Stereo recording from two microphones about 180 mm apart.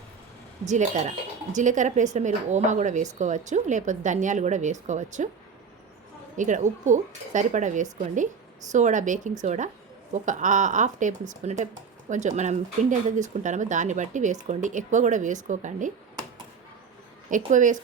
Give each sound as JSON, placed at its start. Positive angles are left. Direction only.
{"t": 0.7, "sound": "speech", "side_deg": -40}
{"t": 6.3, "sound": "speech", "side_deg": -45}
{"t": 17.2, "sound": "speech", "side_deg": -45}